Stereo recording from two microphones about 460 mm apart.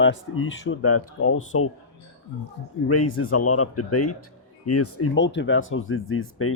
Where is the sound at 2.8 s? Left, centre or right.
Left.